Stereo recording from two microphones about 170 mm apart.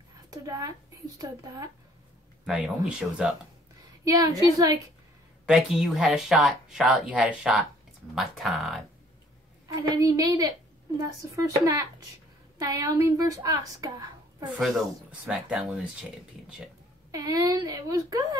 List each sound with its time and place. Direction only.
0.3 s speech: 20° right (ahead or behind)
2.4 s speech: 5° right (ahead or behind)
4.0 s speech: 20° right (ahead or behind)
5.5 s speech: 5° right (ahead or behind)
9.7 s speech: 20° right (ahead or behind)
14.6 s speech: centre (ahead or behind)
17.1 s speech: 20° right (ahead or behind)